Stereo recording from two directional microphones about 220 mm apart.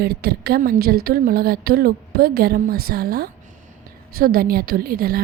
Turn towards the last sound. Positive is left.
turn(degrees=-45)  # may be behind; listen again after turning